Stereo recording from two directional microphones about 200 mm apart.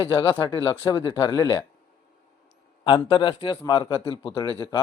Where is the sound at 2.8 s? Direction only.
20° left (ahead or behind).